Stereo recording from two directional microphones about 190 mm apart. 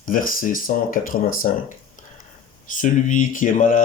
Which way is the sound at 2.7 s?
40° left (ahead or behind).